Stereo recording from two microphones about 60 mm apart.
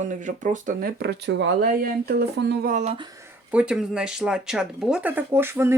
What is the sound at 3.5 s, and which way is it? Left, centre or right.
Speech, centre.